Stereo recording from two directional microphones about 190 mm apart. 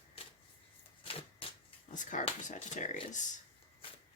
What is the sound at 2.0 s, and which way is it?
Speech, 40° left (ahead or behind).